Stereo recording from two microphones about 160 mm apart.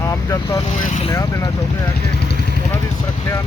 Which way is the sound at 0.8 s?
50° left (ahead or behind).